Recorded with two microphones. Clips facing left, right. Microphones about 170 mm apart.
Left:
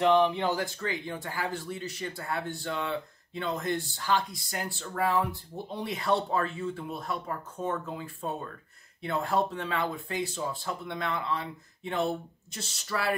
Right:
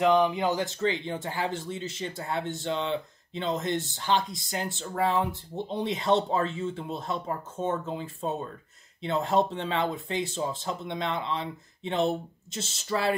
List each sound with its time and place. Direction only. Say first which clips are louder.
0.4 s a man's voice: right 3 dB; 20° right (ahead or behind)